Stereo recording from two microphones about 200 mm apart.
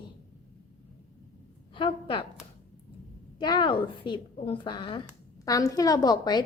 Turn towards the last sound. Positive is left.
turn(degrees=20)  # may be behind; listen again after turning